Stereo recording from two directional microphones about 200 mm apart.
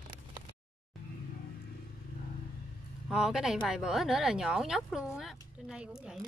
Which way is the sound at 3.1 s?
5° right (ahead or behind).